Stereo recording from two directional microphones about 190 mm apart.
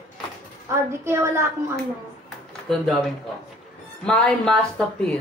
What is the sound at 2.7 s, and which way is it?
Speech, centre (ahead or behind).